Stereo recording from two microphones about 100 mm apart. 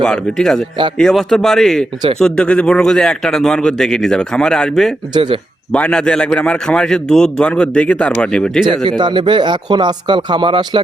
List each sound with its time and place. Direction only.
0.0 s a man's voice: 5° left (ahead or behind)
5.1 s speech: 55° right (ahead or behind)
5.7 s a man's voice: 10° left (ahead or behind)
8.8 s speech: 50° right (ahead or behind)